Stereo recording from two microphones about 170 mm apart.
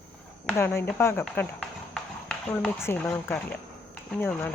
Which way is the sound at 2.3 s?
10° left (ahead or behind).